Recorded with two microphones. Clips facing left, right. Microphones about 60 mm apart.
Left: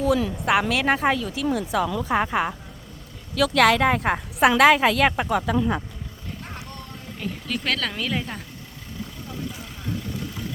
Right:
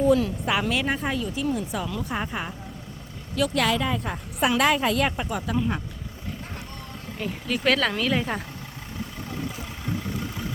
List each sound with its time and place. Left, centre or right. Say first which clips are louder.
0.0 s a woman's voice: right 1 dB; left
7.2 s speech: right 1 dB; centre